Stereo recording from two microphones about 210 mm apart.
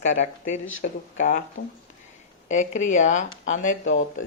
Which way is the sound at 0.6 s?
70° left (ahead or behind).